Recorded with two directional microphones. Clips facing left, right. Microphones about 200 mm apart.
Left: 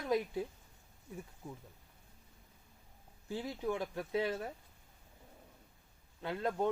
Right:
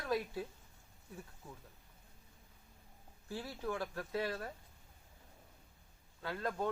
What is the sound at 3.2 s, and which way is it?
Speech, 20° left (ahead or behind).